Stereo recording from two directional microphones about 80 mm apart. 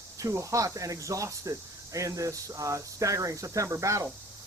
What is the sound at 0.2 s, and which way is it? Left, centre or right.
Speech, right.